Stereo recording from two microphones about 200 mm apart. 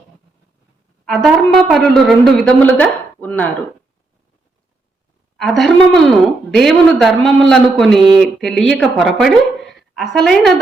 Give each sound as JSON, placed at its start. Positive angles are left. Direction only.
{"t": 1.0, "sound": "a woman's voice", "side_deg": 0}
{"t": 5.4, "sound": "a woman's voice", "side_deg": 0}